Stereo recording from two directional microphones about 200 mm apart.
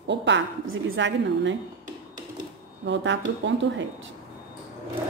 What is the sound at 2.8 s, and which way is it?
A woman's voice, 65° right (ahead or behind).